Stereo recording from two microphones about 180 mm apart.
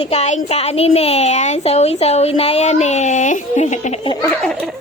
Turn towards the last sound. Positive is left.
turn(degrees=5)  # may be behind; listen again after turning